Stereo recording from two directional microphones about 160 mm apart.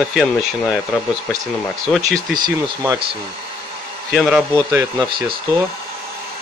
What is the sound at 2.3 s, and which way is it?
Speech, 25° right (ahead or behind).